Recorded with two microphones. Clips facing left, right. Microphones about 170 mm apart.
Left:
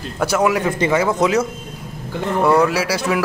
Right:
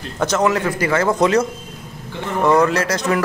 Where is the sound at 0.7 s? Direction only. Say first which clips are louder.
Left 1 dB; 20° left (ahead or behind).